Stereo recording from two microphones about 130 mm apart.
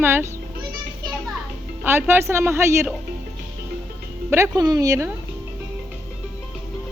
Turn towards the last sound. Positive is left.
turn(degrees=-25)  # may be behind; listen again after turning